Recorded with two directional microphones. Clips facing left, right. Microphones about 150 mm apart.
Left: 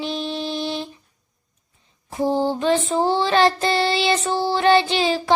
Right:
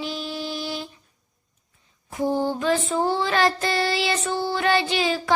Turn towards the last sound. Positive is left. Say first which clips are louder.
# left 3 dB
turn(degrees=30)  # may be behind; listen again after turning